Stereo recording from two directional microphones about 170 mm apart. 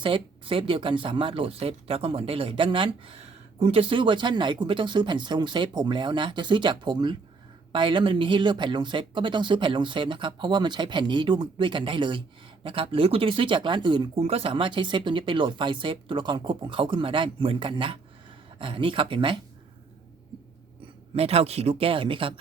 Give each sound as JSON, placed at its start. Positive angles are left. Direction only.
{"t": 0.0, "sound": "speech", "side_deg": -30}
{"t": 21.2, "sound": "speech", "side_deg": -35}